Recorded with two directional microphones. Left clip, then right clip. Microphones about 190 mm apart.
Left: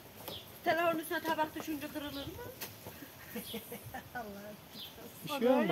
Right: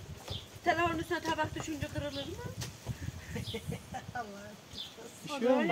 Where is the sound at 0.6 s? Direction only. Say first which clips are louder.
Right 1 dB; 5° left (ahead or behind).